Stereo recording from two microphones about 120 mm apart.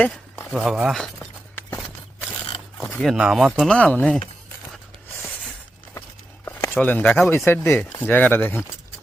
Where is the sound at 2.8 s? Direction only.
15° left (ahead or behind).